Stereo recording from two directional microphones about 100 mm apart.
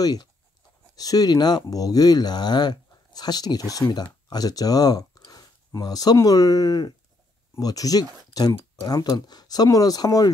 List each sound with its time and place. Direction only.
0.0 s speech: 40° left (ahead or behind)